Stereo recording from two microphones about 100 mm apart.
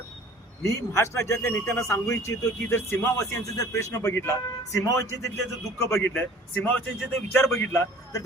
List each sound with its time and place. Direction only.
0.6 s a man's voice: 30° left (ahead or behind)
6.1 s speech: 15° left (ahead or behind)
7.3 s a man's voice: 25° left (ahead or behind)